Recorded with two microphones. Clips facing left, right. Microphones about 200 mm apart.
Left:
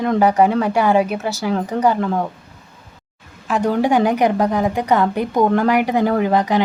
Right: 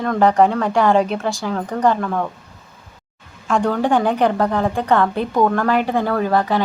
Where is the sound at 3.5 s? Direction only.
5° left (ahead or behind).